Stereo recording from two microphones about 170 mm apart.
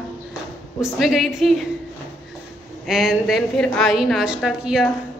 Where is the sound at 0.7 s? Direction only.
5° right (ahead or behind).